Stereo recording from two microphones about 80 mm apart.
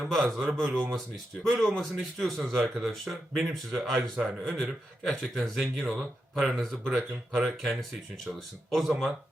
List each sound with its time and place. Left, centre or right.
0.0 s speech: centre